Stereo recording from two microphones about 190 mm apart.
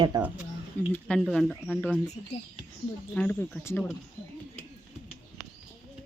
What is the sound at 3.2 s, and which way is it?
Speech, 10° left (ahead or behind).